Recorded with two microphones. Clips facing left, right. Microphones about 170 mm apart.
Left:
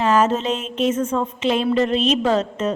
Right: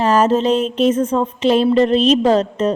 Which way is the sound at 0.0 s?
35° right (ahead or behind).